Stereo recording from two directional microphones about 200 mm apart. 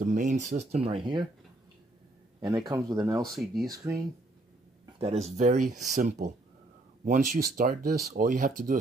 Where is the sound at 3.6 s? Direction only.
15° right (ahead or behind).